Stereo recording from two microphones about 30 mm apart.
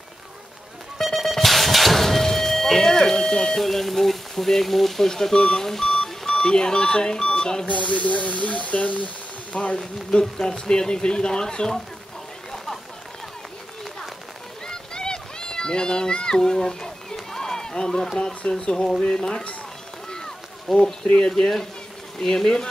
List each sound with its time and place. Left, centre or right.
1.0 s music: centre
5.1 s speech: centre
6.4 s speech: left
7.6 s speech: left
9.5 s speech: left
14.7 s a sound: left
16.3 s run: centre
18.5 s speech: left
20.1 s run: centre
22.2 s speech: centre